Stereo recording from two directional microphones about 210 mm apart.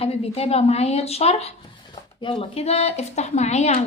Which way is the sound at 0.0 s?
30° left (ahead or behind).